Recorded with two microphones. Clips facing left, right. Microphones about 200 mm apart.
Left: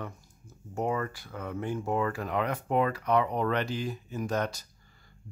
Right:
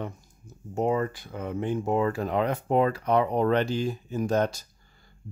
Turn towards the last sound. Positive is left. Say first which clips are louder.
# right 6 dB
turn(degrees=-30)  # may be behind; listen again after turning